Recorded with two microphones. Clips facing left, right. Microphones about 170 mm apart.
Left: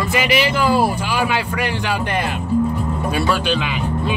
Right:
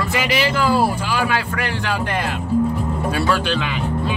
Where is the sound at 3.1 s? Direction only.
15° left (ahead or behind).